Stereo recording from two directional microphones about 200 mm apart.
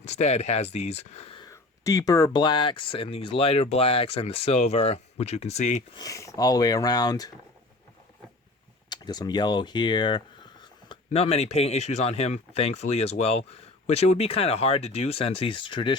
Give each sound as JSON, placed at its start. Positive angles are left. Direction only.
{"t": 0.0, "sound": "speech", "side_deg": 35}
{"t": 1.5, "sound": "speech", "side_deg": 15}
{"t": 6.0, "sound": "speech", "side_deg": 15}
{"t": 8.9, "sound": "speech", "side_deg": 20}